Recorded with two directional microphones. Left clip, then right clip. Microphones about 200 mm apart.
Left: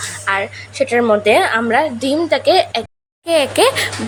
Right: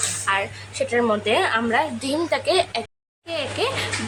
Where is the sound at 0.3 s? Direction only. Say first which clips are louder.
Left 6 dB; 15° left (ahead or behind).